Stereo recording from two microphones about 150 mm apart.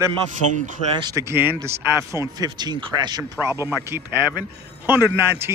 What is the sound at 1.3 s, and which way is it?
Speech, 15° right (ahead or behind).